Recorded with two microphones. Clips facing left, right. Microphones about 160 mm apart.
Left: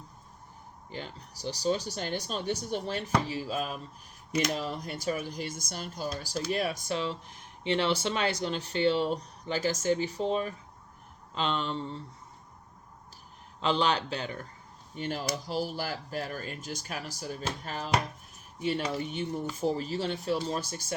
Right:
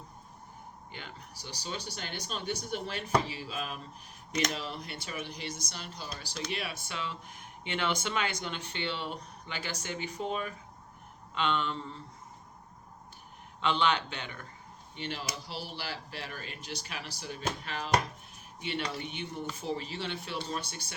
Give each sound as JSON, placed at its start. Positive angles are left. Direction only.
{"t": 0.9, "sound": "speech", "side_deg": 35}
{"t": 13.6, "sound": "speech", "side_deg": 35}
{"t": 18.9, "sound": "speech", "side_deg": 40}